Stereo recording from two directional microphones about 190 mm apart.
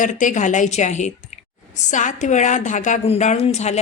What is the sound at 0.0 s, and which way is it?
A woman's voice, 40° left (ahead or behind).